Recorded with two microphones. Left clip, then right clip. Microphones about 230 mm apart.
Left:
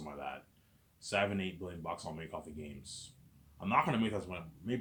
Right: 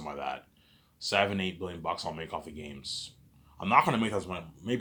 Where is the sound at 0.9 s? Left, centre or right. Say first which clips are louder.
Right 6 dB; right.